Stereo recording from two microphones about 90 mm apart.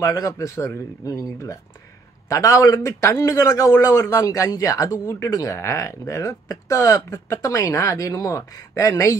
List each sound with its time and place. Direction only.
0.1 s a man's voice: 40° left (ahead or behind)